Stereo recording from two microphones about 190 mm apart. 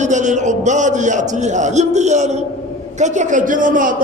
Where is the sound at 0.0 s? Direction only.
40° right (ahead or behind).